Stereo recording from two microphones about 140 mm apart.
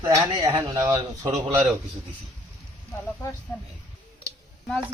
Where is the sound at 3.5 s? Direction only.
20° left (ahead or behind).